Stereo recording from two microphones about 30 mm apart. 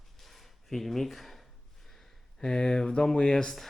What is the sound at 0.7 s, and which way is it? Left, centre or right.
Speech, centre.